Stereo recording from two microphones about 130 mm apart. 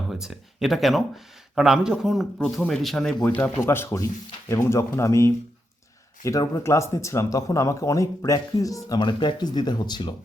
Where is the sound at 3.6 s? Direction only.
20° left (ahead or behind).